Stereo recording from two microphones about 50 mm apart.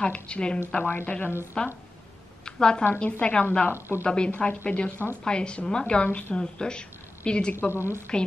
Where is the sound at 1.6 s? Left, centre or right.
Left.